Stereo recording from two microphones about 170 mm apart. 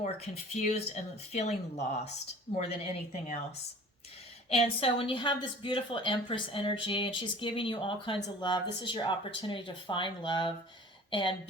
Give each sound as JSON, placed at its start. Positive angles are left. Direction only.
{"t": 0.5, "sound": "speech", "side_deg": 40}
{"t": 4.4, "sound": "a woman's voice", "side_deg": 35}